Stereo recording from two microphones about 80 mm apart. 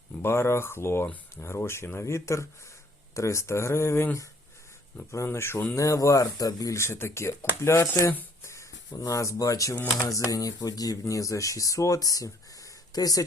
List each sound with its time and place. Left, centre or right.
0.2 s speech: left
5.7 s speech: left
6.7 s speech: left
8.9 s speech: left